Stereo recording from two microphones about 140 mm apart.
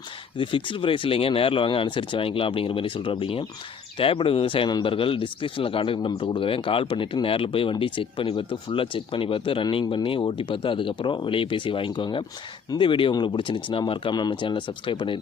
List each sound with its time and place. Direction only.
0.3 s speech: 35° left (ahead or behind)